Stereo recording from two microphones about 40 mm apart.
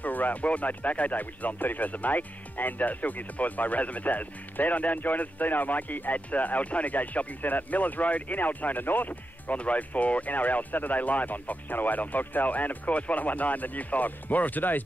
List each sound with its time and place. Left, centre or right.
0.0 s speech: left
9.6 s speech: left